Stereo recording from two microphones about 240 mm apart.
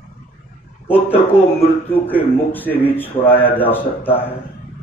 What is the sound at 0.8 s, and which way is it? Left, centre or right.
A man's voice, centre.